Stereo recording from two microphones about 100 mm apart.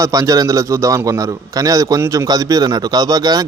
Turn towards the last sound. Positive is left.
turn(degrees=-40)  # may be behind; listen again after turning